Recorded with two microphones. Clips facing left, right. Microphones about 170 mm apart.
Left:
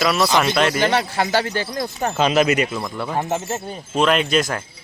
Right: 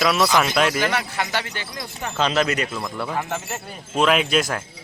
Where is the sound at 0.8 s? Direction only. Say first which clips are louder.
Left 4 dB; 30° left (ahead or behind).